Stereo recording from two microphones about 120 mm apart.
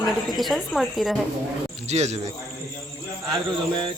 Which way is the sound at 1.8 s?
65° right (ahead or behind).